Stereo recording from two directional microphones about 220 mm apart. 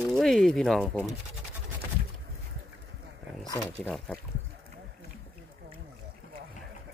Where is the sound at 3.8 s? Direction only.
5° left (ahead or behind).